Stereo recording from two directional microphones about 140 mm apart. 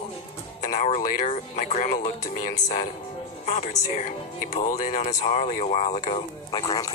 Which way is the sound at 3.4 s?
55° left (ahead or behind).